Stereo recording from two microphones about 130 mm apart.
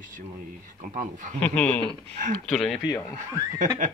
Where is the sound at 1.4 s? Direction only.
10° left (ahead or behind).